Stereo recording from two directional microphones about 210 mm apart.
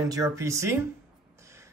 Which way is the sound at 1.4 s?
15° right (ahead or behind).